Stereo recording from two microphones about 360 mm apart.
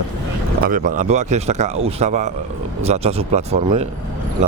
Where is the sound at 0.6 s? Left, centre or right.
Right.